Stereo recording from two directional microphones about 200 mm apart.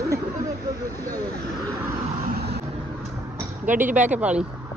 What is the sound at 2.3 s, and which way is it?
Vehicle, 55° right (ahead or behind).